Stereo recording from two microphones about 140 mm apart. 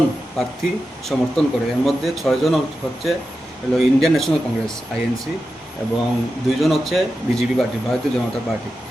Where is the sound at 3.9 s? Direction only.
Centre (ahead or behind).